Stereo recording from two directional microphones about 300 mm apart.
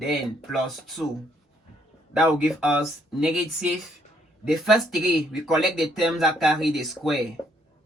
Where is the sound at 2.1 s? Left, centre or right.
Centre.